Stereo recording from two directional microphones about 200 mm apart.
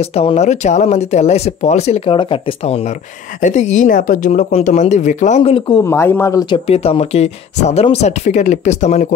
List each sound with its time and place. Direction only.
0.0 s speech: 30° left (ahead or behind); by 6.4 s 10° left (ahead or behind)
6.5 s speech: 30° left (ahead or behind)